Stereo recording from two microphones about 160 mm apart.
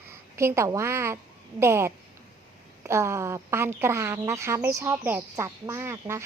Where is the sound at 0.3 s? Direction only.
15° right (ahead or behind).